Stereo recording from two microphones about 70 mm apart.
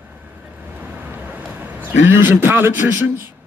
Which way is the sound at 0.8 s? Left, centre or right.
Right.